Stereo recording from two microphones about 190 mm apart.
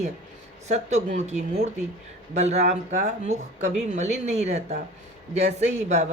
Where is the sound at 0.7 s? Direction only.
35° right (ahead or behind).